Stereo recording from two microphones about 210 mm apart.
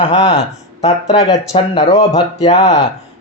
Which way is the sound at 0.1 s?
30° left (ahead or behind).